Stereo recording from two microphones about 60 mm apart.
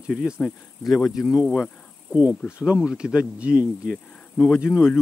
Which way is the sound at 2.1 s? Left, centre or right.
Centre.